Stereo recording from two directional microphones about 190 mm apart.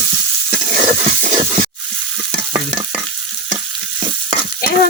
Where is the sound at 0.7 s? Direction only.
40° right (ahead or behind).